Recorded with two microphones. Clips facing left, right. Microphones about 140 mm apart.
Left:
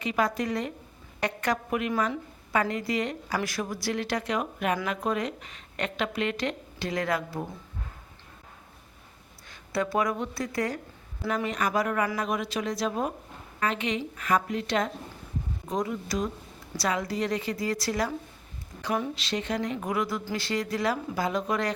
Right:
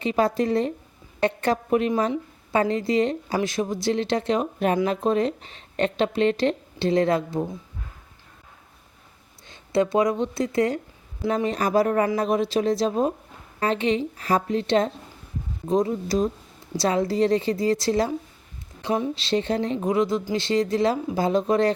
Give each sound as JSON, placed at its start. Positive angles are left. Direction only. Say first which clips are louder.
{"t": 0.0, "sound": "a woman's voice", "louder": "right 6 dB", "side_deg": -30}
{"t": 9.5, "sound": "a woman's voice", "louder": "right 7 dB", "side_deg": -25}